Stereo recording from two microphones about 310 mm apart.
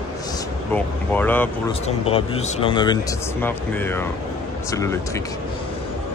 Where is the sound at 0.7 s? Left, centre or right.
Centre.